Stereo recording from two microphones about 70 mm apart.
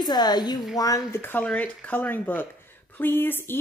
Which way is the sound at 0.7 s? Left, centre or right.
Left.